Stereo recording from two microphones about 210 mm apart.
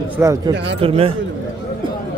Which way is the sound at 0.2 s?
15° right (ahead or behind).